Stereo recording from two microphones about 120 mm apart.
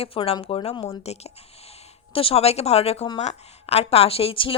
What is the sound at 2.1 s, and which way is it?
A woman's voice, 50° left (ahead or behind).